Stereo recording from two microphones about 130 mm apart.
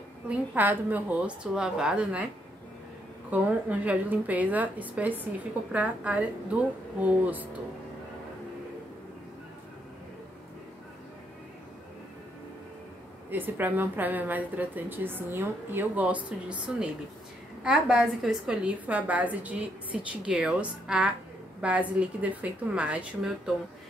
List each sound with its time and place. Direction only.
0.3 s a woman's voice: 15° right (ahead or behind)
3.3 s a woman's voice: 10° right (ahead or behind)
13.3 s a woman's voice: 15° right (ahead or behind)
17.6 s a woman's voice: 5° right (ahead or behind)
19.9 s a woman's voice: 40° left (ahead or behind)
20.2 s a woman's voice: 5° right (ahead or behind)